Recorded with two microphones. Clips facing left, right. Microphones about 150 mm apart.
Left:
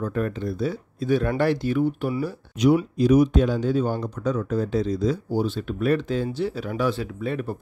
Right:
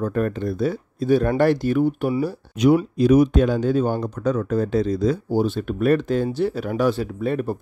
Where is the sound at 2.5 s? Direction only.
55° right (ahead or behind).